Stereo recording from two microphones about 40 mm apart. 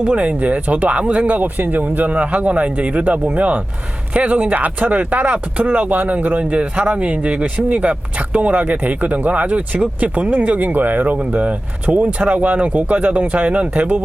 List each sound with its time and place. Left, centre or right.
0.1 s speech: right